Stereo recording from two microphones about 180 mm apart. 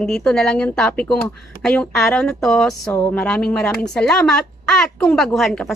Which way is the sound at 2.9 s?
15° left (ahead or behind).